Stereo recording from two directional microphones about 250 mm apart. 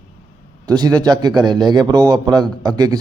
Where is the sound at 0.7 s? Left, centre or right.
Centre.